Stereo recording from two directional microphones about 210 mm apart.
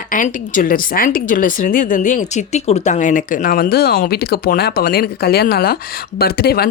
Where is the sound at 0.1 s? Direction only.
40° left (ahead or behind).